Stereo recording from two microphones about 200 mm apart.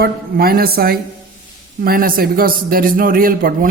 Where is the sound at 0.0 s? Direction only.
50° right (ahead or behind).